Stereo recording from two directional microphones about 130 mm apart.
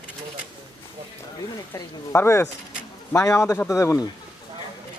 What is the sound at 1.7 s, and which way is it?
Speech, 20° left (ahead or behind).